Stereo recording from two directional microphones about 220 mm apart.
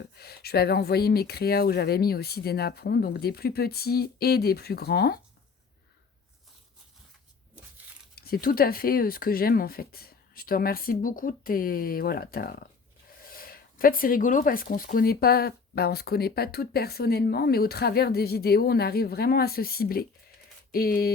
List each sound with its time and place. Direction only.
0.0 s speech: 45° left (ahead or behind)
8.1 s speech: 45° left (ahead or behind)